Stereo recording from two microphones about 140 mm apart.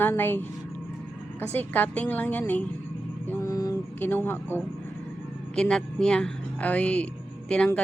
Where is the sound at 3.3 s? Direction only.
25° left (ahead or behind).